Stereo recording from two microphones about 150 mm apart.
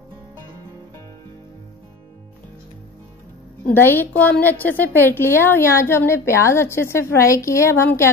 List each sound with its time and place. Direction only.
3.6 s a woman's voice: 15° left (ahead or behind)